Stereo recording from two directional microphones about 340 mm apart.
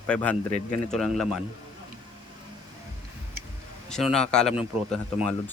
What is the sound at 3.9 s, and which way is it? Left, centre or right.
Speech, centre.